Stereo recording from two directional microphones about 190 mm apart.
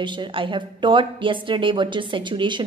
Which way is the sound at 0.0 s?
25° right (ahead or behind).